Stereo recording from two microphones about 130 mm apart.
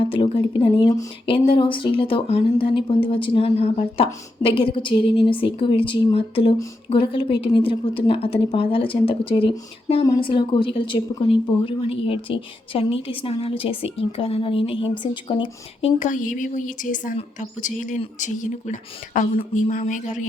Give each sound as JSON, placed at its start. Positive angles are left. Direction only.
{"t": 0.1, "sound": "a woman's voice", "side_deg": 40}
{"t": 16.0, "sound": "a woman's voice", "side_deg": 80}
{"t": 19.4, "sound": "a woman's voice", "side_deg": 55}